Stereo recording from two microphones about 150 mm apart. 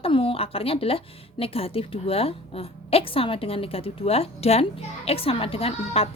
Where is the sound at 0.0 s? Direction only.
35° left (ahead or behind).